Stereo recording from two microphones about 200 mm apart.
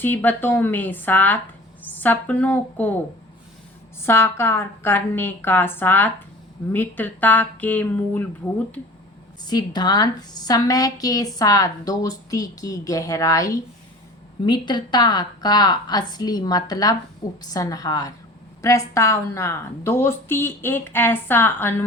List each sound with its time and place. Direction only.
0.0 s speech: 10° left (ahead or behind)
4.0 s speech: 10° left (ahead or behind)
9.4 s a woman's voice: 20° left (ahead or behind)